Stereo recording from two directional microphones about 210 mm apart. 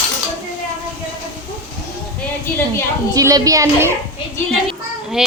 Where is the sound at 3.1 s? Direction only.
15° right (ahead or behind).